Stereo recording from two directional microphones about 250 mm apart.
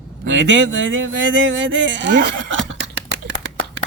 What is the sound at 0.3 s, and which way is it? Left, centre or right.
Speech, right.